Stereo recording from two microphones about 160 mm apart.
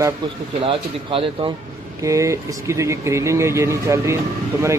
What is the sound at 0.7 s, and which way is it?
Speech, 35° right (ahead or behind).